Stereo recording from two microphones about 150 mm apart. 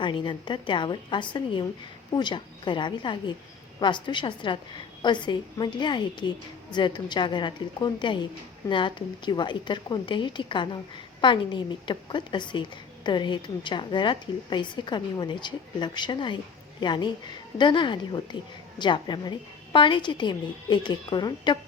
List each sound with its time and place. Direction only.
0.0 s a woman's voice: 30° left (ahead or behind)